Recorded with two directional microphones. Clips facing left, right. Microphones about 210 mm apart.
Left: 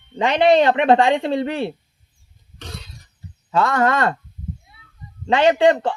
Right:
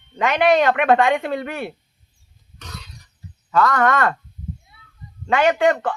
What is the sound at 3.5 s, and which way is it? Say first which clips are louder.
Speech: even; 25° left (ahead or behind).